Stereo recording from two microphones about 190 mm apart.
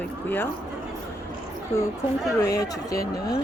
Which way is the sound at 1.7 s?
15° left (ahead or behind).